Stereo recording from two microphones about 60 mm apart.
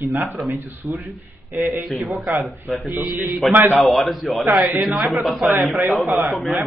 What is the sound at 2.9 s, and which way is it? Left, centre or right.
Speech, right.